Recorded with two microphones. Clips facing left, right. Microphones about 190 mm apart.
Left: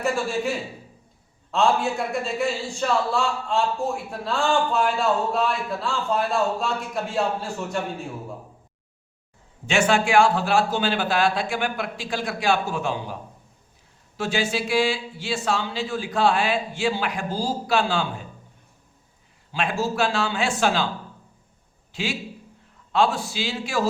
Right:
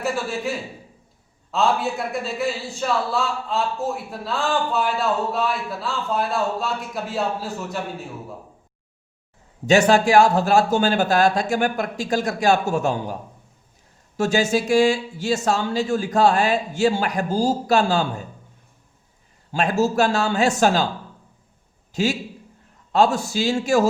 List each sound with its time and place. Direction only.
0.0 s a man's voice: centre (ahead or behind)
9.6 s speech: 40° right (ahead or behind)
14.2 s speech: 45° right (ahead or behind)
19.5 s speech: 40° right (ahead or behind)
21.9 s a man's voice: 40° right (ahead or behind)